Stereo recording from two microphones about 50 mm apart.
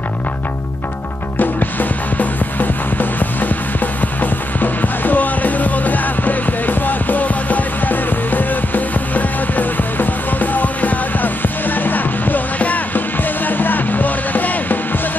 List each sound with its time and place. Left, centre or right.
1.4 s music: left